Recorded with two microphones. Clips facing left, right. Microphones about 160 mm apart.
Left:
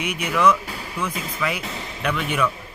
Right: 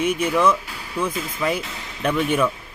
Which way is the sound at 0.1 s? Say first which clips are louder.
Left 4 dB; 30° right (ahead or behind).